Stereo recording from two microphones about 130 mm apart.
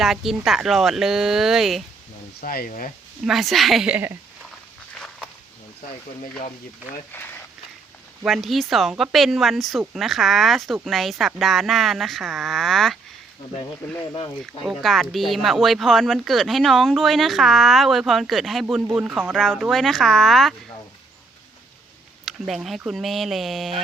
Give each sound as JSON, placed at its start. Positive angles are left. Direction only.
{"t": 0.0, "sound": "speech", "side_deg": 0}
{"t": 2.4, "sound": "speech", "side_deg": 90}
{"t": 3.2, "sound": "speech", "side_deg": 0}
{"t": 4.9, "sound": "walk", "side_deg": 5}
{"t": 7.1, "sound": "speech", "side_deg": 15}
{"t": 8.2, "sound": "speech", "side_deg": 0}
{"t": 14.1, "sound": "speech", "side_deg": 40}
{"t": 14.6, "sound": "speech", "side_deg": 0}
{"t": 19.4, "sound": "speech", "side_deg": 5}
{"t": 22.3, "sound": "speech", "side_deg": 0}